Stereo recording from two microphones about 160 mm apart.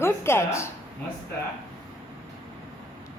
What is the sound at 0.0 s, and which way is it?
Speech, 15° left (ahead or behind).